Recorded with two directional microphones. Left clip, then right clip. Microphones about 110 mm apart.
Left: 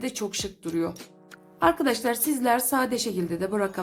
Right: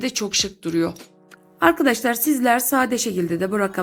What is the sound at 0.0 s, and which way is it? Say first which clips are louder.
A woman's voice: right 8 dB; 25° right (ahead or behind).